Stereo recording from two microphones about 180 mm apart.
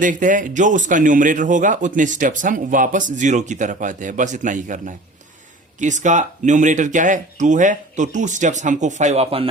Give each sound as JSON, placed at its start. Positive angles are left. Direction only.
{"t": 0.0, "sound": "a man's voice", "side_deg": -45}